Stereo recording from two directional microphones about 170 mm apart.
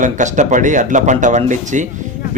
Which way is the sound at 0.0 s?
45° right (ahead or behind).